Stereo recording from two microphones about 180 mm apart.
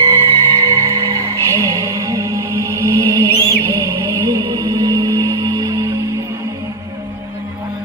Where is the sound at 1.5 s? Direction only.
15° right (ahead or behind).